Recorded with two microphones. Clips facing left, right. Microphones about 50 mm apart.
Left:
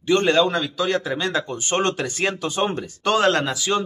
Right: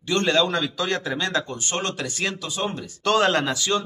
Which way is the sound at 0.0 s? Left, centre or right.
Centre.